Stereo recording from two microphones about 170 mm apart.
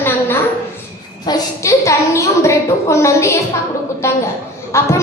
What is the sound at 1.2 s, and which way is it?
A child's voice, 20° left (ahead or behind).